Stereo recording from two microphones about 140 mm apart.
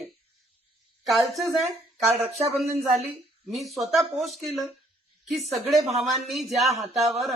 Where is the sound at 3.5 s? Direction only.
Centre (ahead or behind).